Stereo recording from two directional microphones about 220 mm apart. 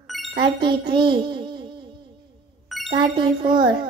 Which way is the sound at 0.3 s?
20° right (ahead or behind).